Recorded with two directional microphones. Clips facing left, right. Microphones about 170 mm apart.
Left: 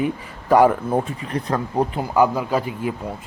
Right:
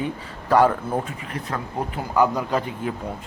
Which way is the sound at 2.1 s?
10° left (ahead or behind).